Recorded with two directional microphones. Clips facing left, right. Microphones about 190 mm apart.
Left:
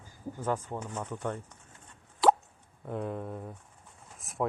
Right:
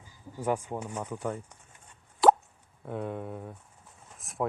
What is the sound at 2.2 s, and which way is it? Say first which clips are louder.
Plop: right 3 dB; 50° right (ahead or behind).